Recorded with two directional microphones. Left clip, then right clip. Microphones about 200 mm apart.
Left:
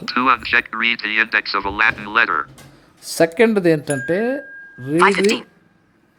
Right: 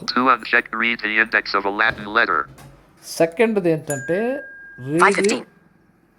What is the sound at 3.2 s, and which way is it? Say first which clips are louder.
Speech: left 3 dB; 15° left (ahead or behind).